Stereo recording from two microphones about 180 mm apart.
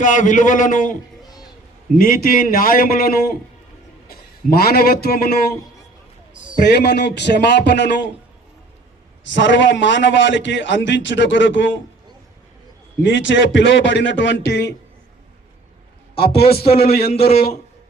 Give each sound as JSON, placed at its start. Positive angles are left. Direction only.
{"t": 0.0, "sound": "a man's voice", "side_deg": 45}
{"t": 2.0, "sound": "a man's voice", "side_deg": 50}
{"t": 4.5, "sound": "a man's voice", "side_deg": 60}
{"t": 6.7, "sound": "speech", "side_deg": 70}
{"t": 9.2, "sound": "a man's voice", "side_deg": 80}
{"t": 13.0, "sound": "a man's voice", "side_deg": 90}
{"t": 16.1, "sound": "a man's voice", "side_deg": 60}
{"t": 16.6, "sound": "speech", "side_deg": 35}
{"t": 16.9, "sound": "a man's voice", "side_deg": 60}